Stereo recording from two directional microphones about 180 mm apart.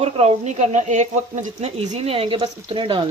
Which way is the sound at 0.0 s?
35° right (ahead or behind).